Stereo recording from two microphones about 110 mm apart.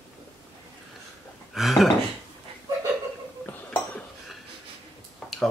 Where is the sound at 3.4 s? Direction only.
15° left (ahead or behind).